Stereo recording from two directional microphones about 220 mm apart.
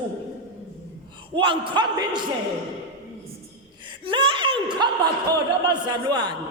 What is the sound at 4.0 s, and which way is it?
A man's voice, 20° right (ahead or behind).